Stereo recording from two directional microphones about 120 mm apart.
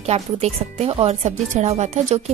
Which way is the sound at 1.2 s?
70° right (ahead or behind).